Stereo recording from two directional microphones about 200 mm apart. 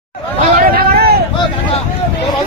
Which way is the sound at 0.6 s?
45° right (ahead or behind).